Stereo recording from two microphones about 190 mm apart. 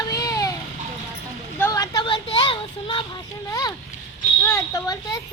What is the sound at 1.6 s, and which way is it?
A child's voice, 20° left (ahead or behind).